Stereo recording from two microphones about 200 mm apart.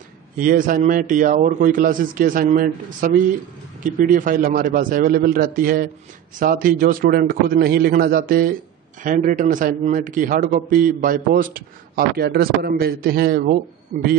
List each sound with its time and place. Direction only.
0.4 s a man's voice: 45° right (ahead or behind)